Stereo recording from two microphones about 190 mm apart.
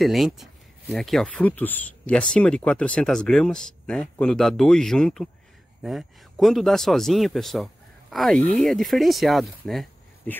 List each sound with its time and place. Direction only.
0.0 s a man's voice: centre (ahead or behind)